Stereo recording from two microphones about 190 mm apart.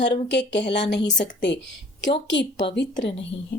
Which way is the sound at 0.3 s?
65° left (ahead or behind).